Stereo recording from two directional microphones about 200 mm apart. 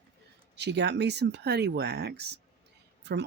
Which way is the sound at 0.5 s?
60° right (ahead or behind).